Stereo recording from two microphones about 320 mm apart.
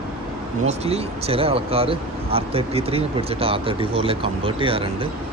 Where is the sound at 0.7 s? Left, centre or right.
Centre.